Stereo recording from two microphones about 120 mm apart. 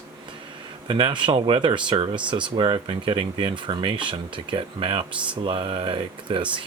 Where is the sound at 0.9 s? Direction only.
40° right (ahead or behind).